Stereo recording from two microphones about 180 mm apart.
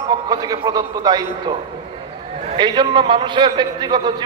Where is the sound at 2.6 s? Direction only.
25° right (ahead or behind).